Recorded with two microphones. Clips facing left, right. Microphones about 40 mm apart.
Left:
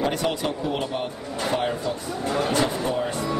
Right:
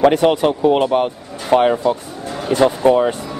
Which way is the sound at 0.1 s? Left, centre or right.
Right.